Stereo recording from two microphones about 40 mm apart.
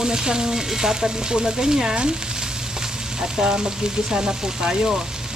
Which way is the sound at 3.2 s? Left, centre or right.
Centre.